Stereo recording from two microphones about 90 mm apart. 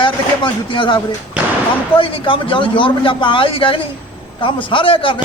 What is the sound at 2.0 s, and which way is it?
A man's voice, 75° left (ahead or behind).